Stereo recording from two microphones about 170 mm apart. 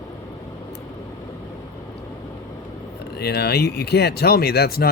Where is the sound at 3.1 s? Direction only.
70° left (ahead or behind).